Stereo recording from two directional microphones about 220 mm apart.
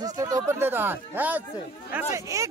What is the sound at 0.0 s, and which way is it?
Speech, 15° right (ahead or behind).